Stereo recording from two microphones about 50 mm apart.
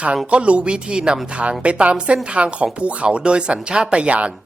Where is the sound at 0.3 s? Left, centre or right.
Right.